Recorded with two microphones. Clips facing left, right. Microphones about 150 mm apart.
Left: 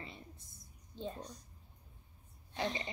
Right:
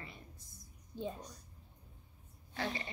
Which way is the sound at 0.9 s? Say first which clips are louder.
Right 1 dB; 10° right (ahead or behind).